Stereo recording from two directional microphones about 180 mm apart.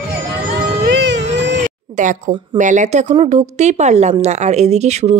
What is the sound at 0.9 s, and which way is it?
Music, 70° right (ahead or behind).